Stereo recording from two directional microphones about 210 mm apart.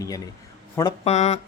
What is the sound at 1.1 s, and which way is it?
Speech, 30° left (ahead or behind).